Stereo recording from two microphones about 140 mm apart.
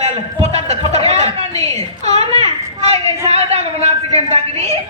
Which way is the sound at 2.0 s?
45° right (ahead or behind).